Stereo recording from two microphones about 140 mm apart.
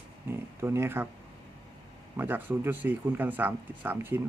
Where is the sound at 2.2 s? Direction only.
15° right (ahead or behind).